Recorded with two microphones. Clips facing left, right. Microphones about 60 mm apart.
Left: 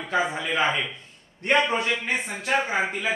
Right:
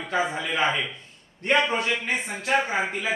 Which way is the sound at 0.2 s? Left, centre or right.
Centre.